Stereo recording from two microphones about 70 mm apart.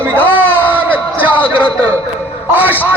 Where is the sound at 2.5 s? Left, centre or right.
Right.